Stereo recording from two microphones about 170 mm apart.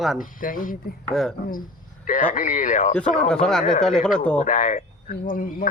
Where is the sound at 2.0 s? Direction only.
50° left (ahead or behind).